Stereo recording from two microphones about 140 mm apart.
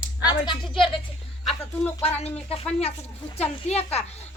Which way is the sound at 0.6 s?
Centre (ahead or behind).